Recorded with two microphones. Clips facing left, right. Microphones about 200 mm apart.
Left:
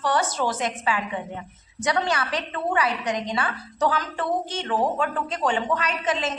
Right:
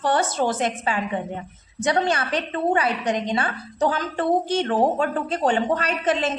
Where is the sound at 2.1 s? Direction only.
25° right (ahead or behind).